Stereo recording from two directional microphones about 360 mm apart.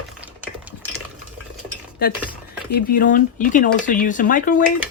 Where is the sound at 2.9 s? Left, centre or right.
Left.